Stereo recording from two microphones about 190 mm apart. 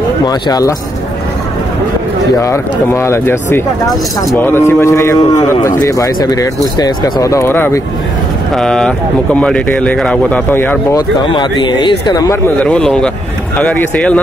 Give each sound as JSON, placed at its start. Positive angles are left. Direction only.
{"t": 0.3, "sound": "speech", "side_deg": 20}
{"t": 2.4, "sound": "speech", "side_deg": 15}
{"t": 12.5, "sound": "speech", "side_deg": 5}